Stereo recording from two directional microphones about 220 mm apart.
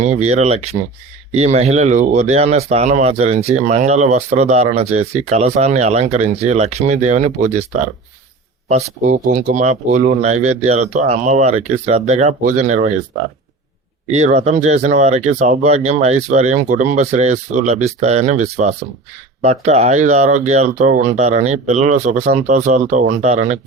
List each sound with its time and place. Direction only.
0.0 s speech: 30° right (ahead or behind)
8.7 s speech: 35° right (ahead or behind)
14.1 s speech: 30° right (ahead or behind)